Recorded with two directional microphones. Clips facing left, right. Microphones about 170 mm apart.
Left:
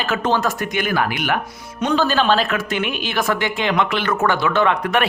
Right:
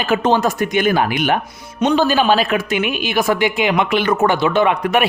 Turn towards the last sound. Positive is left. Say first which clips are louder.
# right 3 dB
turn(degrees=-10)  # may be behind; listen again after turning